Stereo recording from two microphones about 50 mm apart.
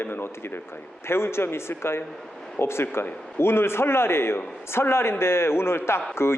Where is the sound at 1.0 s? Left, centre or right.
Left.